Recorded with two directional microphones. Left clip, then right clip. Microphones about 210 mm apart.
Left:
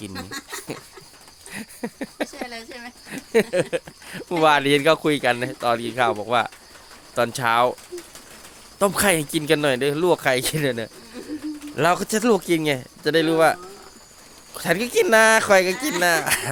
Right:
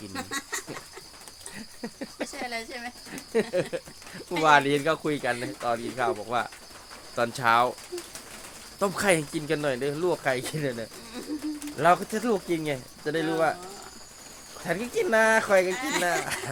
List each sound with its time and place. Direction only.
0.1 s speech: centre (ahead or behind)
1.5 s a sound: 40° left (ahead or behind)
2.3 s a sound: 5° left (ahead or behind)
3.1 s speech: 40° left (ahead or behind)
8.8 s speech: 40° left (ahead or behind)
14.6 s speech: 50° left (ahead or behind)
15.7 s speech: centre (ahead or behind)
16.0 s speech: 45° left (ahead or behind)